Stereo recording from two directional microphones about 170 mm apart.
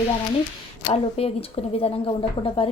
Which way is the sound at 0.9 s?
35° left (ahead or behind).